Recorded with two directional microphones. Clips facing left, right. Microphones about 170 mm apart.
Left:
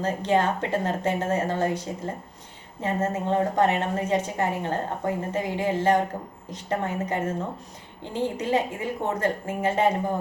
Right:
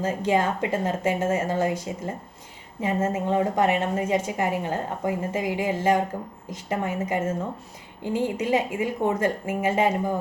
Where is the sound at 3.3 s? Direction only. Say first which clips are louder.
Even; 15° right (ahead or behind).